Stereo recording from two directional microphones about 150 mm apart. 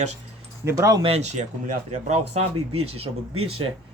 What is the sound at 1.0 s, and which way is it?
Speech, 45° right (ahead or behind).